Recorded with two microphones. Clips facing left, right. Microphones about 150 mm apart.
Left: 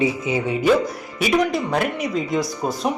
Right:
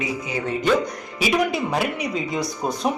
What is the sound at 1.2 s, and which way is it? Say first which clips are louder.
Speech: left 2 dB; centre (ahead or behind).